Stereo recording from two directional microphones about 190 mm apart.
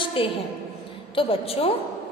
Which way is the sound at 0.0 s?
30° left (ahead or behind).